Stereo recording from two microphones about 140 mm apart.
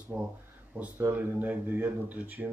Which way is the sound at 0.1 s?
15° right (ahead or behind).